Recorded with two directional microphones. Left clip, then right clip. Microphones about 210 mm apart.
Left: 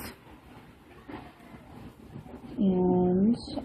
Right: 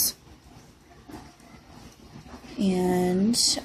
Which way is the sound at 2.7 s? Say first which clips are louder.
Right 1 dB; 25° right (ahead or behind).